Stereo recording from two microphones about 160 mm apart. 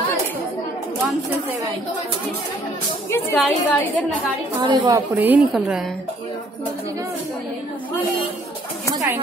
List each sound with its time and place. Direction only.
3.1 s a woman's voice: 15° left (ahead or behind)
4.6 s a woman's voice: 25° right (ahead or behind)
5.1 s a woman's voice: 10° right (ahead or behind)